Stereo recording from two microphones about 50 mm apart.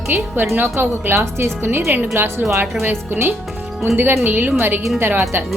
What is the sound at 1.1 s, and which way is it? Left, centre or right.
Speech, right.